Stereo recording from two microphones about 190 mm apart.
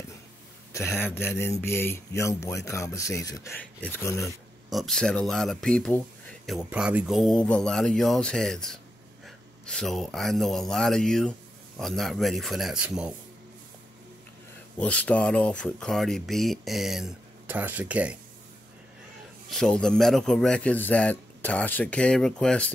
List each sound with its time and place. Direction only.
0.7 s speech: 10° left (ahead or behind)
4.6 s speech: centre (ahead or behind)
14.8 s speech: 5° left (ahead or behind)
19.5 s speech: 5° left (ahead or behind)